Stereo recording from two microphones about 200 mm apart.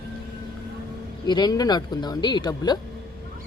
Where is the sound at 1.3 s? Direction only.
20° left (ahead or behind).